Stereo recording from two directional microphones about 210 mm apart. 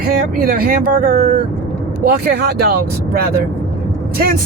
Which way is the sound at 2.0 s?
50° right (ahead or behind).